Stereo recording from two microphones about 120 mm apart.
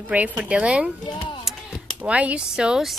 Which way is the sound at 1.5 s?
Centre (ahead or behind).